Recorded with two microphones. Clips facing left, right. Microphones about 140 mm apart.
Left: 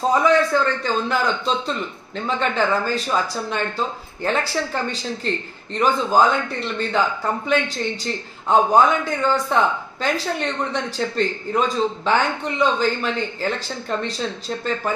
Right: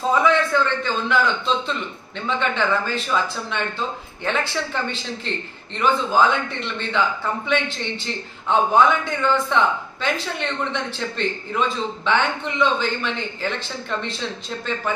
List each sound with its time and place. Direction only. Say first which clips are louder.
0.1 s a man's voice: left 1 dB; 40° left (ahead or behind)